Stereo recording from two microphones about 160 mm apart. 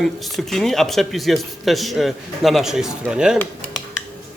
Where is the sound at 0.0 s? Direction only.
Centre (ahead or behind).